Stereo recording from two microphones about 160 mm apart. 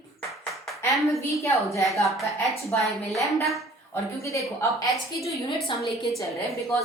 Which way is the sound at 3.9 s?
20° left (ahead or behind).